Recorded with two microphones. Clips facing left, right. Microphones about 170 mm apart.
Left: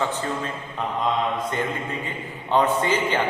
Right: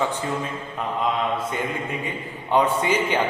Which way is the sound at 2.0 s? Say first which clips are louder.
Right 1 dB; 10° right (ahead or behind).